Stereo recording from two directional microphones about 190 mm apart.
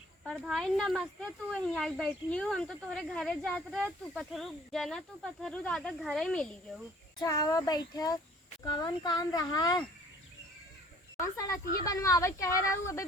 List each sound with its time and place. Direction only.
0.3 s speech: centre (ahead or behind)
7.2 s speech: 20° left (ahead or behind)
11.2 s speech: 15° left (ahead or behind)